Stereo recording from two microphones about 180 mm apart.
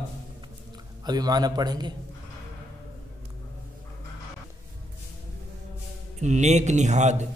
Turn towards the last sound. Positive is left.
turn(degrees=-40)  # may be behind; listen again after turning